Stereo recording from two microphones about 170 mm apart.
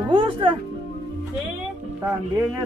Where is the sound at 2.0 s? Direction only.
15° right (ahead or behind).